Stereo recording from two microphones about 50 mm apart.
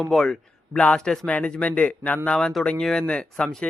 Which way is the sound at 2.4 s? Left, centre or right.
Centre.